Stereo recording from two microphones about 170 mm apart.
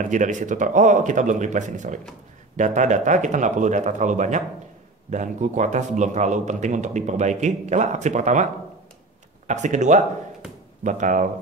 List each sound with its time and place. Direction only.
0.0 s speech: 45° right (ahead or behind)
9.5 s speech: 45° right (ahead or behind)